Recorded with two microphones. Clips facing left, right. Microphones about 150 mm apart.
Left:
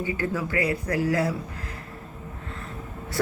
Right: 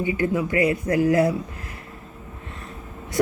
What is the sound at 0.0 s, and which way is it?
Speech, 20° right (ahead or behind).